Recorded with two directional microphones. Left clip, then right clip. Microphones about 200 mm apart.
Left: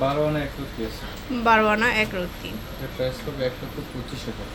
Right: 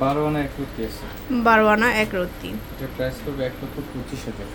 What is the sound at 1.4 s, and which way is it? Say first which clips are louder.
Speech: right 2 dB; 20° right (ahead or behind).